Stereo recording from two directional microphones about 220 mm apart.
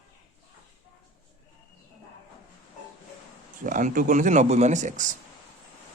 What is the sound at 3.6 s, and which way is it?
Speech, 35° right (ahead or behind).